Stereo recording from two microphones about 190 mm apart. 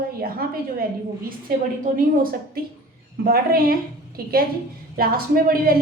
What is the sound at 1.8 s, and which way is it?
A woman's voice, 45° right (ahead or behind).